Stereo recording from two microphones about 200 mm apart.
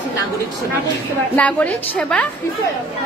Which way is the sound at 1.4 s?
5° left (ahead or behind).